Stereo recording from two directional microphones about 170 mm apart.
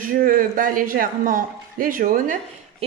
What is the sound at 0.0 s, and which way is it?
Speech, 55° right (ahead or behind).